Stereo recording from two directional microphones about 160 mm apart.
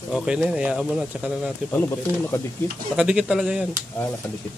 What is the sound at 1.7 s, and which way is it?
Speech, 15° left (ahead or behind).